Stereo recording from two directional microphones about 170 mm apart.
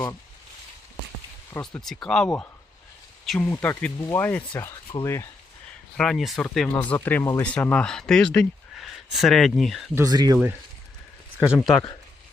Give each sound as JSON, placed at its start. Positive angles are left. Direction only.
{"t": 1.6, "sound": "speech", "side_deg": 0}
{"t": 6.0, "sound": "speech", "side_deg": 0}
{"t": 9.9, "sound": "speech", "side_deg": -20}
{"t": 11.3, "sound": "speech", "side_deg": -5}